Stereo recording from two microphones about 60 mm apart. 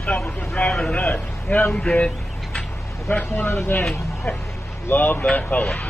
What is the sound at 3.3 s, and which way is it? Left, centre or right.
Speech, left.